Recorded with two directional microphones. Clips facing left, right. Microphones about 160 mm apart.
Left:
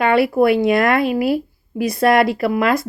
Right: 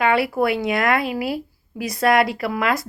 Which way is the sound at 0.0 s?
25° left (ahead or behind).